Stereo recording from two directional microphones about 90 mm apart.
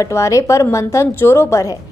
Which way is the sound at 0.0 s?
35° left (ahead or behind).